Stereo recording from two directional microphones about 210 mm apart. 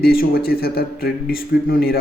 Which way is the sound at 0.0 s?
45° left (ahead or behind).